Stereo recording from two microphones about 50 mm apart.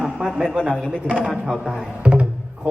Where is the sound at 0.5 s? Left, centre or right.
Centre.